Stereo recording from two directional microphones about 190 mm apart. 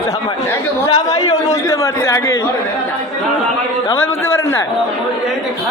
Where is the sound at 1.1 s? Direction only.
20° left (ahead or behind).